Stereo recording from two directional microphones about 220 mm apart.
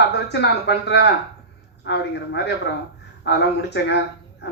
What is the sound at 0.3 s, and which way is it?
A man's voice, 50° left (ahead or behind).